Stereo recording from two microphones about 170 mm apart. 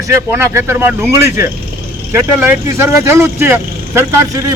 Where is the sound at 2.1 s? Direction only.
15° right (ahead or behind).